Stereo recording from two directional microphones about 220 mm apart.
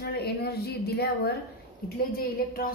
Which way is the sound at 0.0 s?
45° left (ahead or behind).